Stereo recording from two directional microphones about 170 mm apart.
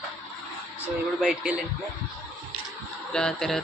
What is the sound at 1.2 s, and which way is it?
Speech, 5° right (ahead or behind).